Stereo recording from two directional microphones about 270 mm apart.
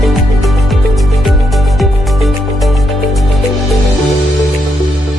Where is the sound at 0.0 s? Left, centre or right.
Centre.